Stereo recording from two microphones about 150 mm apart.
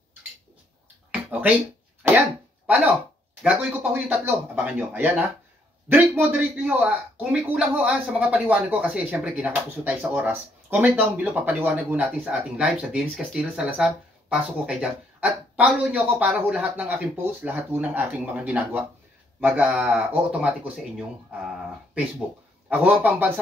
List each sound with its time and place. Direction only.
1.1 s a sound: 10° right (ahead or behind)
2.1 s cough: 10° right (ahead or behind)
3.4 s speech: 10° right (ahead or behind)
22.7 s speech: 10° right (ahead or behind)